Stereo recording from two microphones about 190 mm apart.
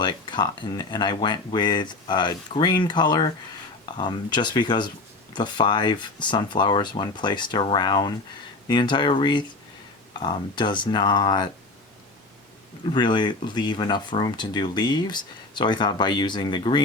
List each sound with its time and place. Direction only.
0.0 s speech: 25° left (ahead or behind)
12.9 s speech: 25° left (ahead or behind)